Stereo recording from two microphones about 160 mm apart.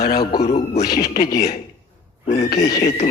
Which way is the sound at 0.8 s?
75° left (ahead or behind).